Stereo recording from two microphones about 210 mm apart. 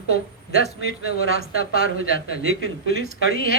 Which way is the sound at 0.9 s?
45° left (ahead or behind).